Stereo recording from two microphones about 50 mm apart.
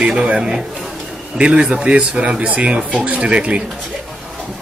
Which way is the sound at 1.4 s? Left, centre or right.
Centre.